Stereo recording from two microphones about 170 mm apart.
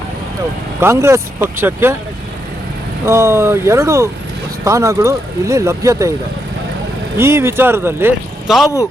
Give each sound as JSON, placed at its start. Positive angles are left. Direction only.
{"t": 0.8, "sound": "speech", "side_deg": -15}
{"t": 3.1, "sound": "speech", "side_deg": -15}
{"t": 7.2, "sound": "speech", "side_deg": -15}
{"t": 8.4, "sound": "speech", "side_deg": 0}